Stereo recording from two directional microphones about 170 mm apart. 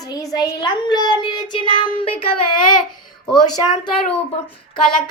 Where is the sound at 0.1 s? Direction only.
20° left (ahead or behind).